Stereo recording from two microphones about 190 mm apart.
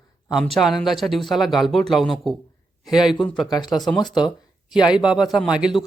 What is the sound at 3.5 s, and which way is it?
Speech, 20° left (ahead or behind).